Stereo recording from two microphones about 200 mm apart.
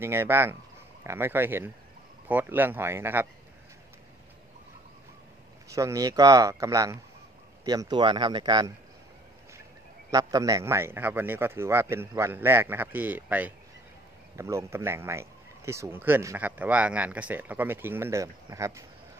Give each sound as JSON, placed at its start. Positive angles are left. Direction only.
{"t": 0.0, "sound": "speech", "side_deg": -10}
{"t": 5.7, "sound": "speech", "side_deg": -15}
{"t": 10.1, "sound": "speech", "side_deg": -15}